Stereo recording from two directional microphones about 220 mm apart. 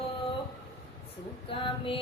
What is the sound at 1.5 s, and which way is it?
Music, 25° left (ahead or behind).